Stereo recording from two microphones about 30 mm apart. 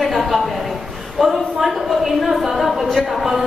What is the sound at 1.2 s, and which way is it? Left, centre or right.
A woman's voice, centre.